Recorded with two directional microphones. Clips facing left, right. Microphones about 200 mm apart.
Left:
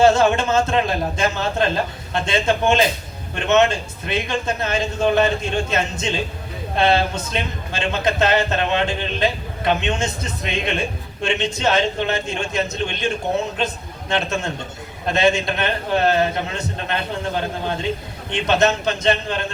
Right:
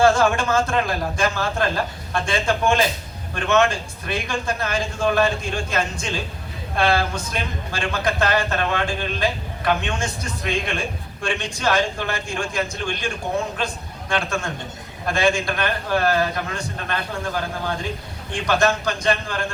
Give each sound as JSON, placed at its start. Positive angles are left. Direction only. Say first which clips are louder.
{"t": 0.0, "sound": "speech", "louder": "left 2 dB", "side_deg": 25}